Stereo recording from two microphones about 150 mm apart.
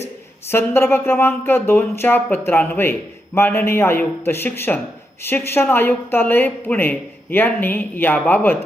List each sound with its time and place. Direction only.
0.4 s a woman's voice: 15° left (ahead or behind)